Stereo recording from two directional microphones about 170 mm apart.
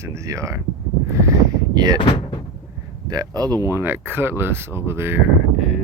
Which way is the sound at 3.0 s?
20° right (ahead or behind).